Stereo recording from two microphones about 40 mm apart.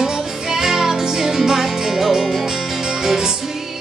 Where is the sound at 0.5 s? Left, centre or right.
Centre.